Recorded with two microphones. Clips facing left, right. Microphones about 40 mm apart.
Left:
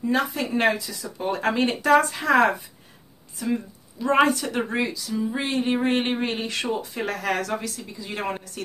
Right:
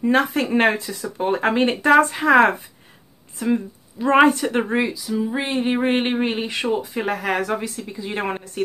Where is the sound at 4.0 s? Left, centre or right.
Right.